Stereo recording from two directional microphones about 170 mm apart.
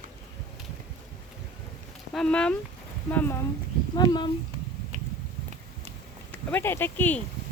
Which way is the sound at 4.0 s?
25° left (ahead or behind).